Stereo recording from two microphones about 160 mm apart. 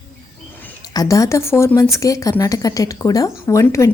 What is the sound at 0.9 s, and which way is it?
A woman's voice, 20° left (ahead or behind).